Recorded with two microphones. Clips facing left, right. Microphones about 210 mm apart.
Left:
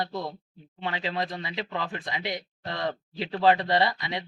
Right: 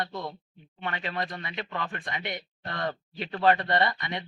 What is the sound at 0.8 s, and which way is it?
Speech, 20° left (ahead or behind).